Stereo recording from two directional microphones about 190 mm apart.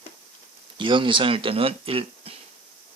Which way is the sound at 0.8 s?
25° right (ahead or behind).